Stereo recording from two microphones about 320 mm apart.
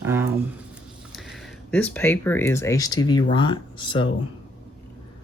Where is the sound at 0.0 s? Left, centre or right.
Centre.